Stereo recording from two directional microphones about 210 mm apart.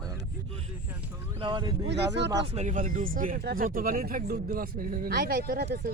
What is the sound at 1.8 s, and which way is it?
Speech, 55° right (ahead or behind).